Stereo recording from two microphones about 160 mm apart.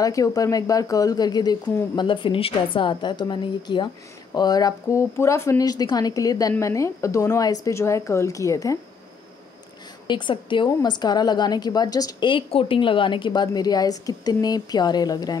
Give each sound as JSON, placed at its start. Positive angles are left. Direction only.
{"t": 0.0, "sound": "speech", "side_deg": 20}
{"t": 10.0, "sound": "speech", "side_deg": 30}